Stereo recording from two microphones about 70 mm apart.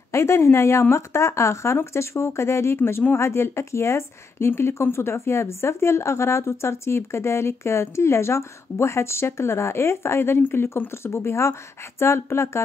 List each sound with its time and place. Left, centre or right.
0.1 s speech: left